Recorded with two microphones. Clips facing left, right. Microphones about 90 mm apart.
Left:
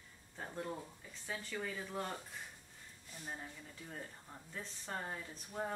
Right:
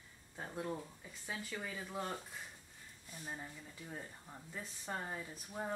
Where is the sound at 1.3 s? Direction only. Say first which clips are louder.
Left 1 dB; 5° right (ahead or behind).